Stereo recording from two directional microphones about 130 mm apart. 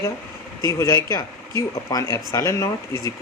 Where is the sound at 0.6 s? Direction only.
25° left (ahead or behind).